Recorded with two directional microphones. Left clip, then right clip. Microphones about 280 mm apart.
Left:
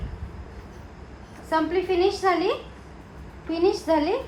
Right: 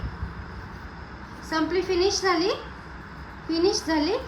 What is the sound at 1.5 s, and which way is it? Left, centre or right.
A woman's voice, centre.